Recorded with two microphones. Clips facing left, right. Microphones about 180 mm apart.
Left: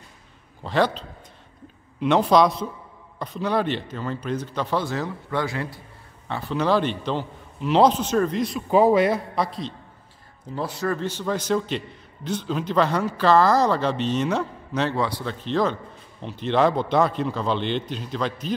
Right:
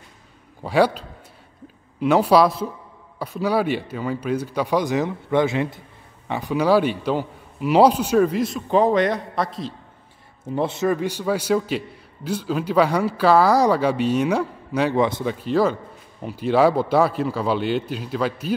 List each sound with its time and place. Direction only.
0.7 s a man's voice: 10° right (ahead or behind)
10.4 s a man's voice: 25° right (ahead or behind)
15.0 s speech: 20° right (ahead or behind)
15.3 s a man's voice: 10° right (ahead or behind)